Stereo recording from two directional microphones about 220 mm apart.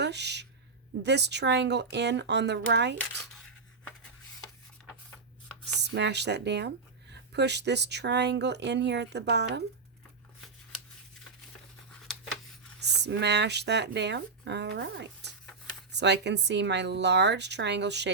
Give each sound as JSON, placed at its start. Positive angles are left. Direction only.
{"t": 0.0, "sound": "speech", "side_deg": -50}
{"t": 5.9, "sound": "speech", "side_deg": -50}
{"t": 12.8, "sound": "speech", "side_deg": -50}